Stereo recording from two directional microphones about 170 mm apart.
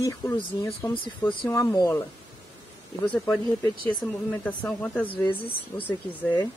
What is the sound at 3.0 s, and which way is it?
Speech, 10° left (ahead or behind).